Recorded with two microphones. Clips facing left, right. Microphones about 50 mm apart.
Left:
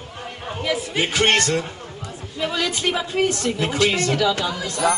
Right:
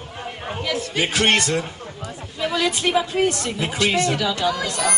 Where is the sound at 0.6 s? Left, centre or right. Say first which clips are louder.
Left 2 dB; centre.